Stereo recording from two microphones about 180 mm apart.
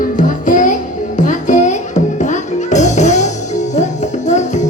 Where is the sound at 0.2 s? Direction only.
45° left (ahead or behind).